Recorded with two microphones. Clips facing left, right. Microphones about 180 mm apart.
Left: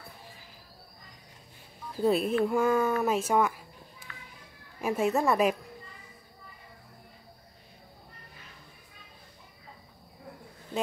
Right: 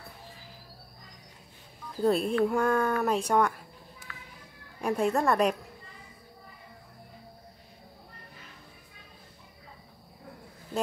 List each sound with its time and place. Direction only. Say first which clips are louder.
2.0 s speech: even; centre (ahead or behind)
4.1 s children playing: right 2 dB; 30° left (ahead or behind)
4.7 s speech: even; centre (ahead or behind)